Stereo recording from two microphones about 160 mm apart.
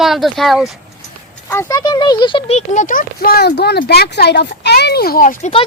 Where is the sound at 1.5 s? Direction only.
20° left (ahead or behind); by 5.5 s 55° left (ahead or behind).